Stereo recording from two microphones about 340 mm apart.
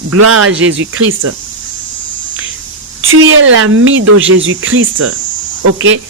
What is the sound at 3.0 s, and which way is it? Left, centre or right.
Speech, right.